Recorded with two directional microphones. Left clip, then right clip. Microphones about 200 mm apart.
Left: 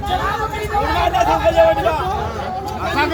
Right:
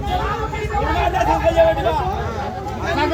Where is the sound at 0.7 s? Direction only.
55° left (ahead or behind).